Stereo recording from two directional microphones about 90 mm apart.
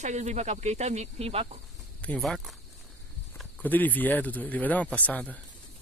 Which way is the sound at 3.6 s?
20° left (ahead or behind).